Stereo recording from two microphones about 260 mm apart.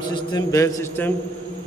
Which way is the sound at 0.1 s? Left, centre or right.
Centre.